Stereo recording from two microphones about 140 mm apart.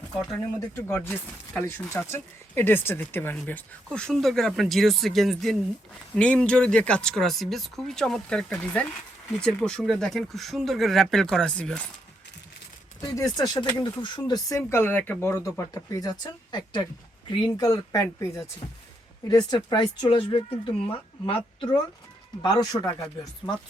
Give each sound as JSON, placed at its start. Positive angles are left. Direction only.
{"t": 0.8, "sound": "speech", "side_deg": 15}
{"t": 13.0, "sound": "speech", "side_deg": 25}
{"t": 14.7, "sound": "speech", "side_deg": 15}
{"t": 22.4, "sound": "speech", "side_deg": 25}